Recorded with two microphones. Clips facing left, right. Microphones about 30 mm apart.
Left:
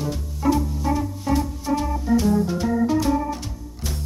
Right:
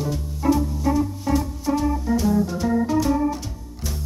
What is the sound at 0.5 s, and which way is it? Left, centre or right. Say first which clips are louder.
Music: right 4 dB; centre.